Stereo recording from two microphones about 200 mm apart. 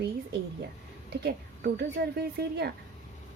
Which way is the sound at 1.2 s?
50° right (ahead or behind).